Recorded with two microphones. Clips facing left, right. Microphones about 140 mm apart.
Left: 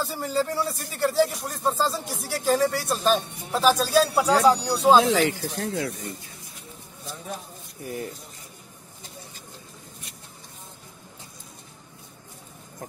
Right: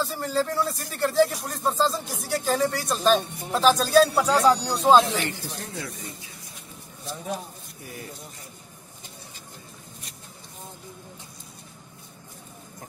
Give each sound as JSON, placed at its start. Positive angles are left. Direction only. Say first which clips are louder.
{"t": 0.0, "sound": "speech", "louder": "even", "side_deg": 10}
{"t": 5.0, "sound": "speech", "louder": "left 7 dB", "side_deg": 90}
{"t": 5.6, "sound": "speech", "louder": "left 7 dB", "side_deg": 60}